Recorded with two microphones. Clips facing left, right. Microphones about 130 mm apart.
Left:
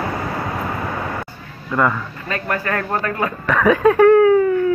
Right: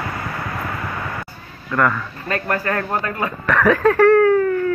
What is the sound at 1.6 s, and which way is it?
Speech, 15° left (ahead or behind).